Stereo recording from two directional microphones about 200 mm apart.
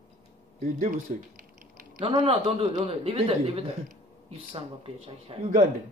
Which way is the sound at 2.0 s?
25° right (ahead or behind).